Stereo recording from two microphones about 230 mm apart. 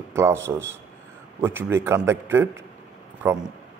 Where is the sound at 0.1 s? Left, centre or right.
Centre.